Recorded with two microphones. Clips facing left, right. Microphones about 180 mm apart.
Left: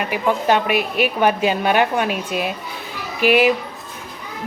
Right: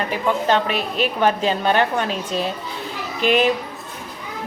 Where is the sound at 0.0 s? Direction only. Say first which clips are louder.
Left 1 dB; 10° left (ahead or behind).